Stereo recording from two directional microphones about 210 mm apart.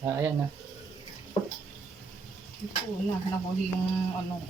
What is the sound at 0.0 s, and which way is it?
Speech, 10° right (ahead or behind).